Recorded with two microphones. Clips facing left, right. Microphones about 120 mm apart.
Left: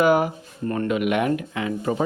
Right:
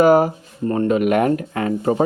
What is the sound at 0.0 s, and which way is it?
Speech, 35° right (ahead or behind).